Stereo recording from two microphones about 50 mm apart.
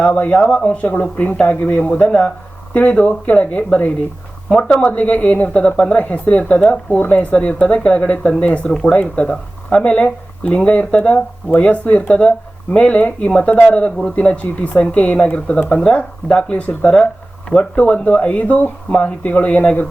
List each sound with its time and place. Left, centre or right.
0.0 s speech: left